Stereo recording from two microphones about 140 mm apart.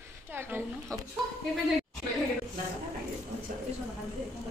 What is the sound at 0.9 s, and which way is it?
Speech, 25° right (ahead or behind).